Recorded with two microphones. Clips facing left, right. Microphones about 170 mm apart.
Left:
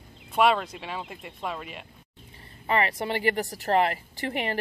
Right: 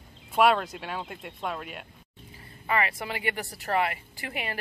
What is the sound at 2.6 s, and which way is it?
Speech, 30° left (ahead or behind).